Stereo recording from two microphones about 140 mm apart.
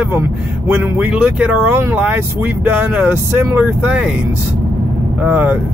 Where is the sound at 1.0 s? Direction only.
10° right (ahead or behind).